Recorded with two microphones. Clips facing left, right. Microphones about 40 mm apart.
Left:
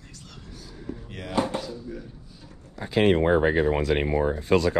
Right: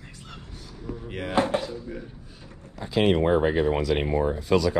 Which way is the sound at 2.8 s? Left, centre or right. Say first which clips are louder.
Left 1 dB; left.